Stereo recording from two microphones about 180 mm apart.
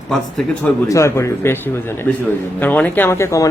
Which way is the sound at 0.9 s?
15° left (ahead or behind).